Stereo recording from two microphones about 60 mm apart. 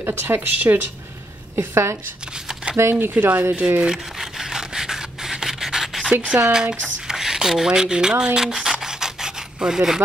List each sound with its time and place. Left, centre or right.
0.0 s speech: right
1.6 s a woman's voice: right
2.4 s a sound: centre
2.8 s speech: right
3.8 s rub: centre
6.2 s speech: centre
7.1 s rub: centre